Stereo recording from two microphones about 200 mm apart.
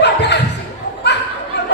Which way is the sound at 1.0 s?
60° left (ahead or behind).